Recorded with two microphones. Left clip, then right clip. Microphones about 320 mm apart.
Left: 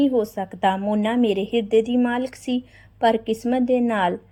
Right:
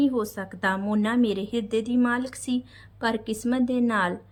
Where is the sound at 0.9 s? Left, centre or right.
Centre.